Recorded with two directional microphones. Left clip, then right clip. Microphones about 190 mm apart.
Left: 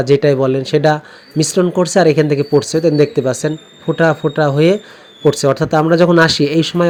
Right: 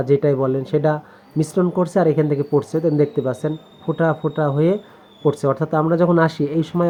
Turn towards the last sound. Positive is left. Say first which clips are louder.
# left 7 dB
turn(degrees=30)  # may be behind; listen again after turning